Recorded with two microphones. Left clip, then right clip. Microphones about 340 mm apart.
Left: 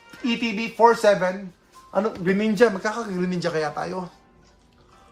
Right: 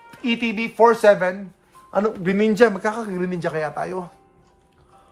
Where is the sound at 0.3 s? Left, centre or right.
Right.